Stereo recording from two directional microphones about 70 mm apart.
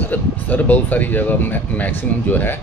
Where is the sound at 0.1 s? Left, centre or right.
Left.